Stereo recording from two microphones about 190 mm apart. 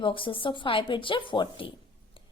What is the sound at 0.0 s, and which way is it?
A woman's voice, 25° left (ahead or behind).